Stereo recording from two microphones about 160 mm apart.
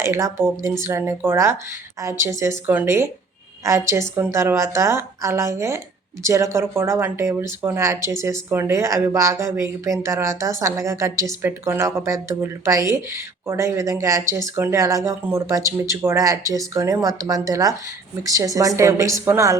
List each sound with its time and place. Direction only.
0.0 s speech: 15° right (ahead or behind)